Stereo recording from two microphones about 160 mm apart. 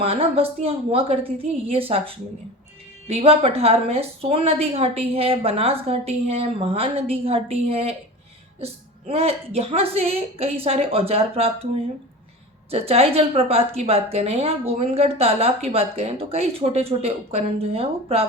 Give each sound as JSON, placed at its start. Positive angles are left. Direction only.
{"t": 0.0, "sound": "a woman's voice", "side_deg": -35}
{"t": 12.7, "sound": "a woman's voice", "side_deg": -40}